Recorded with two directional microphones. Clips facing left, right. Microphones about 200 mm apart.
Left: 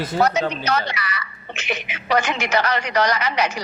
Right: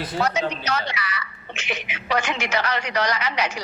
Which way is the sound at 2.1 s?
40° left (ahead or behind).